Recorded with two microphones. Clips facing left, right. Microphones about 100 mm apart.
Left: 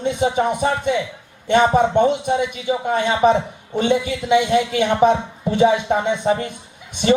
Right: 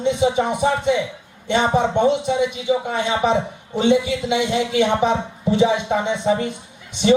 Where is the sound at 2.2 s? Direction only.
50° left (ahead or behind).